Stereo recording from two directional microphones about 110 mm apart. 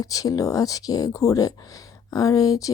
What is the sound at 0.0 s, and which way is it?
Speech, 30° left (ahead or behind).